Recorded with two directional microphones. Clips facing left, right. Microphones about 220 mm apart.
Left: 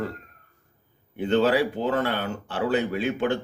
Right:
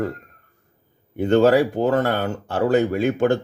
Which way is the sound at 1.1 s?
45° right (ahead or behind).